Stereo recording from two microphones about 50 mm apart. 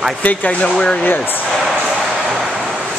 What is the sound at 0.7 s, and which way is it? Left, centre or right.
Speech, centre.